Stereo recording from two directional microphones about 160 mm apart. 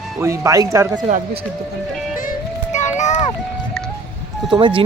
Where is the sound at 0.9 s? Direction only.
55° right (ahead or behind).